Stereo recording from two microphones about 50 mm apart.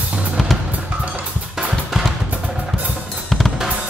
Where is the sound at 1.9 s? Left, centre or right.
Centre.